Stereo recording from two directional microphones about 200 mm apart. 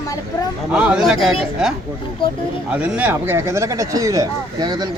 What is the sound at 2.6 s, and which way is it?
Speech, 5° right (ahead or behind).